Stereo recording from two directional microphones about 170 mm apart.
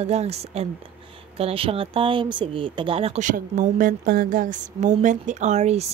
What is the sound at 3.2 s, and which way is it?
Speech, 50° right (ahead or behind).